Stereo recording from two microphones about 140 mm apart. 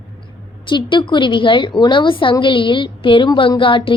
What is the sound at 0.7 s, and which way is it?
A woman's voice, 35° left (ahead or behind).